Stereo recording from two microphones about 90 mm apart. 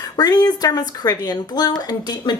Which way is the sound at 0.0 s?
50° left (ahead or behind).